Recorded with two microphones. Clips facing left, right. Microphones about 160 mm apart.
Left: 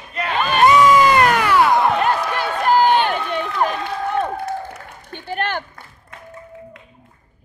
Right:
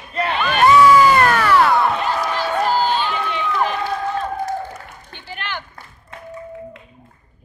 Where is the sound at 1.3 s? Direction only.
15° left (ahead or behind).